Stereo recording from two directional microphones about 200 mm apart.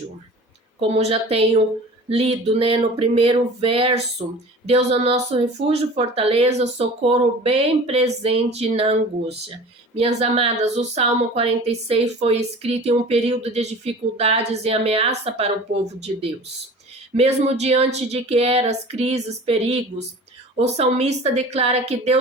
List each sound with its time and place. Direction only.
0.8 s speech: 30° right (ahead or behind)